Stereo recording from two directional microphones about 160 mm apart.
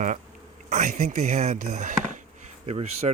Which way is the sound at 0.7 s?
50° right (ahead or behind).